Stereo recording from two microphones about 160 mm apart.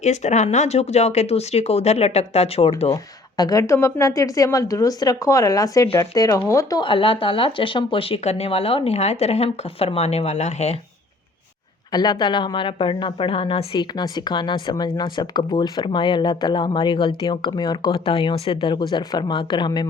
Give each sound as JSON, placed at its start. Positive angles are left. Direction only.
{"t": 0.0, "sound": "speech", "side_deg": 45}
{"t": 2.9, "sound": "speech", "side_deg": 25}
{"t": 11.9, "sound": "speech", "side_deg": 25}